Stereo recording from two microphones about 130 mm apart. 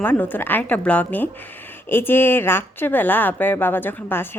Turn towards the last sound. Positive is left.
turn(degrees=15)  # may be behind; listen again after turning